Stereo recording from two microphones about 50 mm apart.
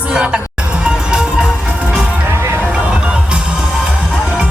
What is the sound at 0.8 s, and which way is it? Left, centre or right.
Music, centre.